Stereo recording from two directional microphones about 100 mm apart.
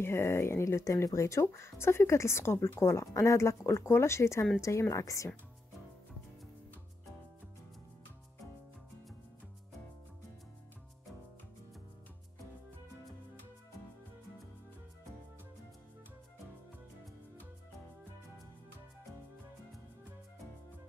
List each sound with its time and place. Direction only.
0.0 s a woman's voice: 25° left (ahead or behind)